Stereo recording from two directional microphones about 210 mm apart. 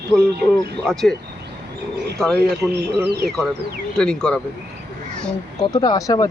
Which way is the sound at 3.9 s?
5° left (ahead or behind).